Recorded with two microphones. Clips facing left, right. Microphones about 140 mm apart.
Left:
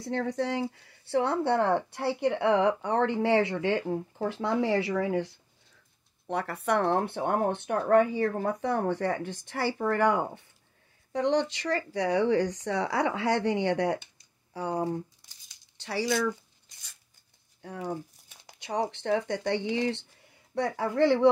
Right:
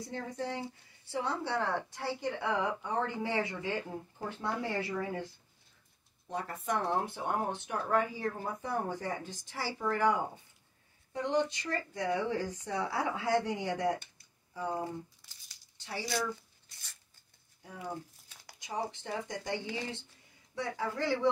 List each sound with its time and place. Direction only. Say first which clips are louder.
0.0 s speech: left 8 dB; 75° left (ahead or behind)
6.2 s speech: left 6 dB; 70° left (ahead or behind)
11.1 s speech: left 5 dB; 85° left
15.8 s speech: left 8 dB; 90° left
17.6 s speech: left 6 dB; 70° left (ahead or behind)
20.5 s speech: left 8 dB; 60° left (ahead or behind)